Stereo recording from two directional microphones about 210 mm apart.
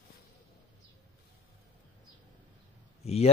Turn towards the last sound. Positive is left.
turn(degrees=30)  # may be behind; listen again after turning